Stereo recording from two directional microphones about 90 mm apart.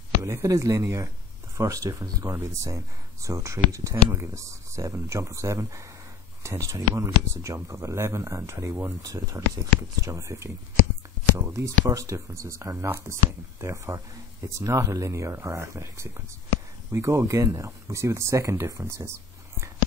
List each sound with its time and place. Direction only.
0.2 s speech: 35° right (ahead or behind)